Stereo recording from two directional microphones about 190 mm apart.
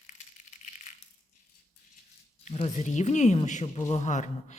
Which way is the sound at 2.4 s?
35° left (ahead or behind).